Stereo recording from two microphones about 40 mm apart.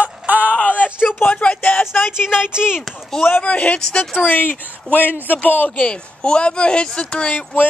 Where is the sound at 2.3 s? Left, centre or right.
Centre.